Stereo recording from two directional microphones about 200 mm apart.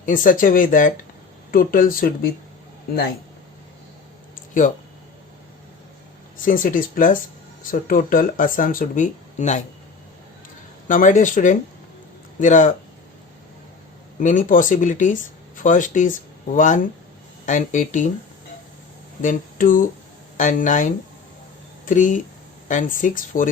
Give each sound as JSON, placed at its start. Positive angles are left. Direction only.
{"t": 0.0, "sound": "speech", "side_deg": 40}
{"t": 4.6, "sound": "speech", "side_deg": 40}
{"t": 6.3, "sound": "speech", "side_deg": 45}
{"t": 10.8, "sound": "speech", "side_deg": 40}
{"t": 14.2, "sound": "speech", "side_deg": 40}
{"t": 19.2, "sound": "speech", "side_deg": 40}